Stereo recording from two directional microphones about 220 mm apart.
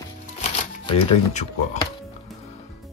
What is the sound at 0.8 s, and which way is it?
Speech, 30° left (ahead or behind).